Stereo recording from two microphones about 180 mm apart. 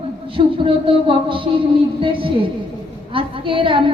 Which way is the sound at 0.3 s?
30° right (ahead or behind).